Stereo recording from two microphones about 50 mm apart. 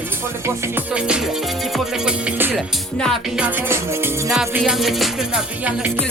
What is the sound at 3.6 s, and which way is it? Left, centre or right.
Music, right.